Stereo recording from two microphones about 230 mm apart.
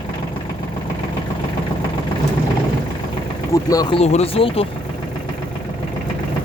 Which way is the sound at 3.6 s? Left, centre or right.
Centre.